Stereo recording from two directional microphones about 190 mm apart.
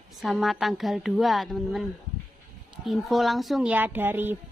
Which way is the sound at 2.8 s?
Centre (ahead or behind).